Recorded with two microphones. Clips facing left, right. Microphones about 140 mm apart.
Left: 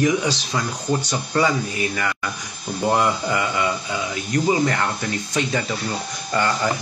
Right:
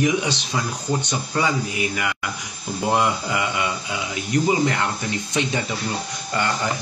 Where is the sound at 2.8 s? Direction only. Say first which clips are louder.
Left 1 dB; 15° right (ahead or behind).